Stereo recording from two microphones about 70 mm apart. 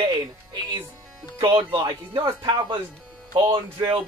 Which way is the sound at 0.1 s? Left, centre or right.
Right.